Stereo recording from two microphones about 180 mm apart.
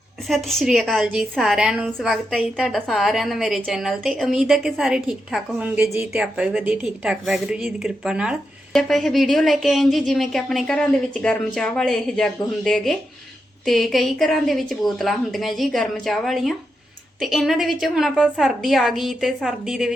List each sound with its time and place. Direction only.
0.3 s a woman's voice: centre (ahead or behind)